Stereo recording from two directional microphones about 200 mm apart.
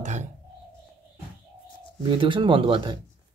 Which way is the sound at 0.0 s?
35° right (ahead or behind).